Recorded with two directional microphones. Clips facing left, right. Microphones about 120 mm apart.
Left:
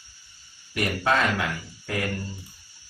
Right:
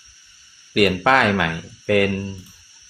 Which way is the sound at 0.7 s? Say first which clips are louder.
Right 8 dB; 70° right (ahead or behind).